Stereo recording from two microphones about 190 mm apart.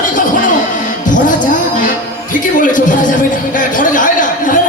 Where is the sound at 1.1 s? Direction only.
45° left (ahead or behind).